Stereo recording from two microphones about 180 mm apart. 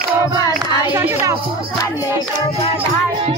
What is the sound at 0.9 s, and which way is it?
Music, 15° right (ahead or behind).